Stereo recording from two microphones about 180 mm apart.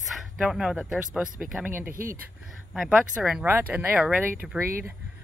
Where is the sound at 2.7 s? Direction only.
5° right (ahead or behind).